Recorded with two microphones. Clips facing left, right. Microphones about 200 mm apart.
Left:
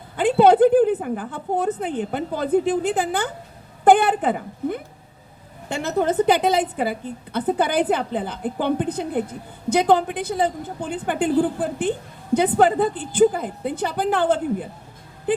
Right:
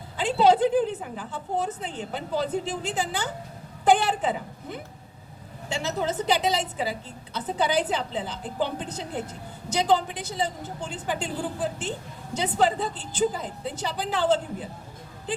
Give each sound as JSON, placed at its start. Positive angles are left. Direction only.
{"t": 0.2, "sound": "a woman's voice", "side_deg": 55}